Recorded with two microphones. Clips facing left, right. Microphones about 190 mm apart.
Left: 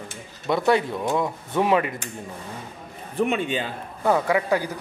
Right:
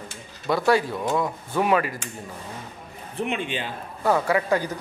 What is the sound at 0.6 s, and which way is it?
Speech, 20° left (ahead or behind).